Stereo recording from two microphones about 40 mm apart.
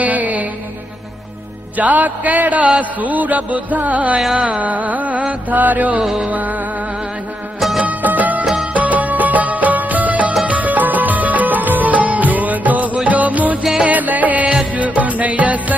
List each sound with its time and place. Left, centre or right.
0.0 s music: right
1.8 s a sound: right
3.0 s music: right
5.5 s a sound: right
7.8 s music of bollywood: right
8.7 s music: right